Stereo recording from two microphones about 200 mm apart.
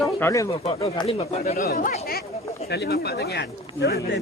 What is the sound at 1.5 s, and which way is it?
Speech, 50° left (ahead or behind).